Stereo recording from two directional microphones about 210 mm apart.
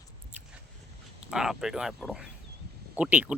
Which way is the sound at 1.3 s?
5° right (ahead or behind).